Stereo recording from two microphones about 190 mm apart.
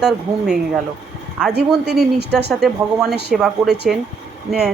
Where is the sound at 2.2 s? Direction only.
60° right (ahead or behind).